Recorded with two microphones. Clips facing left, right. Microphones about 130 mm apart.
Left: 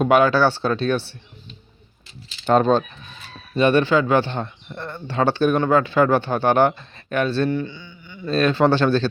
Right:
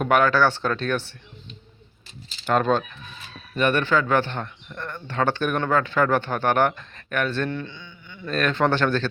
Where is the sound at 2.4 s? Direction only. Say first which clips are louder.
Left 4 dB; 25° left (ahead or behind).